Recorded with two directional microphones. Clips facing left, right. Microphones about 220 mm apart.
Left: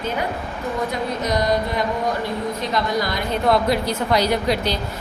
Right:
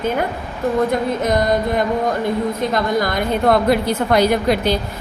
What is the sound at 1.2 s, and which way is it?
A woman's voice, 50° right (ahead or behind).